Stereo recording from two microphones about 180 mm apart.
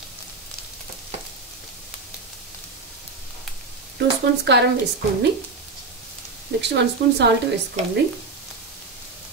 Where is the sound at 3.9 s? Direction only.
70° right (ahead or behind).